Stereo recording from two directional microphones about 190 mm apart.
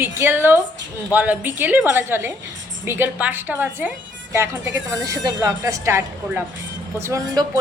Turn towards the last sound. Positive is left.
turn(degrees=-20)  # may be behind; listen again after turning